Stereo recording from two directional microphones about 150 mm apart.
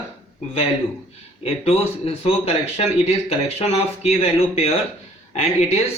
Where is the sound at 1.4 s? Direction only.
40° left (ahead or behind).